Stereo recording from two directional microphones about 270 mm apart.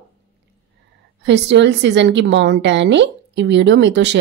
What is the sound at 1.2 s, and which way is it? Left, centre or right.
Speech, right.